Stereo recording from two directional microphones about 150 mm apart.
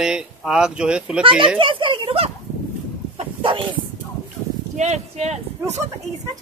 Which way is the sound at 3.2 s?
40° right (ahead or behind).